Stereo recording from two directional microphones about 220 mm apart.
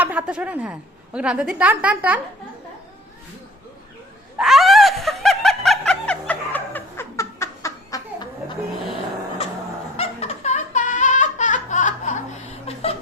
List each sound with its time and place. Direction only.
0.0 s a woman's voice: 5° right (ahead or behind)
4.4 s snicker: centre (ahead or behind); by 8.3 s 15° left (ahead or behind)
10.0 s laughter: 30° left (ahead or behind)